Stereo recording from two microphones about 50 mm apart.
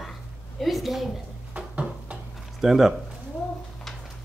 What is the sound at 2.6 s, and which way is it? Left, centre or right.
Speech, centre.